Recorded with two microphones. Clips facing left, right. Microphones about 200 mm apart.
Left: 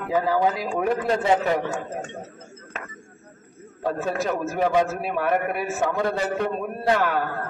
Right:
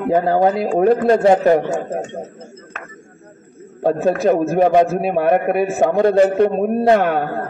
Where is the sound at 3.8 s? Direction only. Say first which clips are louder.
Right 9 dB; 45° right (ahead or behind).